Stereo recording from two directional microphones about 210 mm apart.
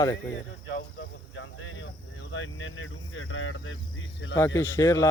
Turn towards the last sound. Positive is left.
turn(degrees=15)  # may be behind; listen again after turning